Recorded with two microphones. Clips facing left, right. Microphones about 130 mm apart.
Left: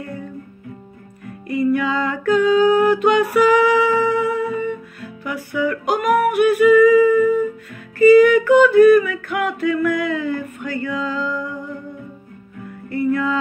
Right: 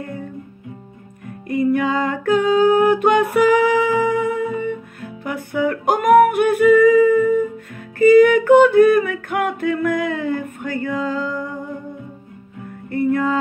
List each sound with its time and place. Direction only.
1.5 s music: 50° right (ahead or behind)
8.0 s singing: 55° right (ahead or behind)
9.8 s music: 50° right (ahead or behind)
10.4 s a sound: 50° right (ahead or behind)
12.9 s music: 50° right (ahead or behind)